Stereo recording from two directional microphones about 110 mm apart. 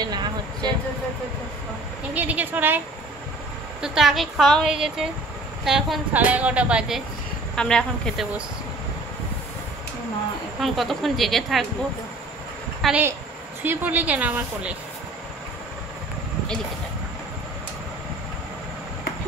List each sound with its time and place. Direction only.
0.0 s a sound: 40° right (ahead or behind)
2.1 s a woman's voice: 15° right (ahead or behind)
3.8 s a woman's voice: 5° right (ahead or behind)
6.1 s a woman's voice: 15° right (ahead or behind)
7.5 s speech: 5° left (ahead or behind)
10.6 s a woman's voice: centre (ahead or behind)
12.8 s a woman's voice: centre (ahead or behind)
13.6 s a woman's voice: 15° right (ahead or behind)